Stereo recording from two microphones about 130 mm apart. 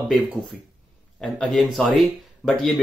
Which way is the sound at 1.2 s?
5° left (ahead or behind).